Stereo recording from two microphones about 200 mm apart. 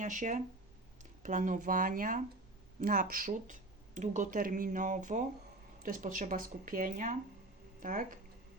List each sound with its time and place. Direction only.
0.0 s speech: 40° right (ahead or behind)